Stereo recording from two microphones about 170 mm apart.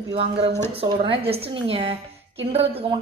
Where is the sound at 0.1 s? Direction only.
35° right (ahead or behind).